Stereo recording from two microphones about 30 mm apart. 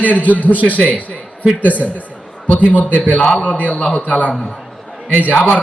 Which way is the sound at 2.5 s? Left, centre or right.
Left.